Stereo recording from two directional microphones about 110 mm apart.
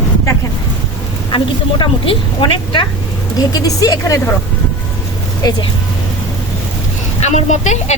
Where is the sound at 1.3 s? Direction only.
50° left (ahead or behind).